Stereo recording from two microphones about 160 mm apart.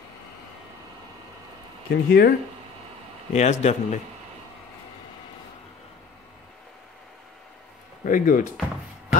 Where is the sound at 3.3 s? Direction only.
45° left (ahead or behind).